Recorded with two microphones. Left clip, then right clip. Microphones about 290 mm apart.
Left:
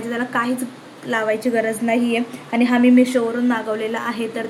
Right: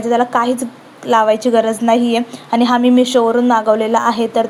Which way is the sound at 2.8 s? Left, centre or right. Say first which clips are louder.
Right 4 dB; right.